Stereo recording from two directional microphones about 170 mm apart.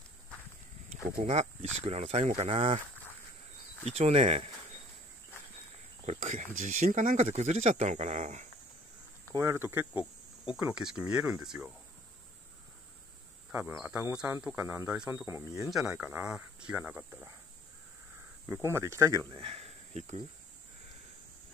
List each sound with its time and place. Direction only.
1.1 s speech: 40° right (ahead or behind)
3.8 s speech: 40° right (ahead or behind)
6.0 s speech: 50° right (ahead or behind)
9.3 s speech: 15° right (ahead or behind)
13.5 s speech: 10° right (ahead or behind)
15.6 s speech: centre (ahead or behind)
18.5 s speech: 15° right (ahead or behind)
19.3 s speech: 35° right (ahead or behind)